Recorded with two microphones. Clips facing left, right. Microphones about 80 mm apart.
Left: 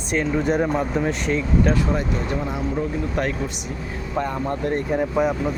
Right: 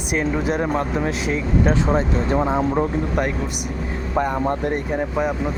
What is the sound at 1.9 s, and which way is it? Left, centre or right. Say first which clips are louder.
Speech: right 4 dB; right.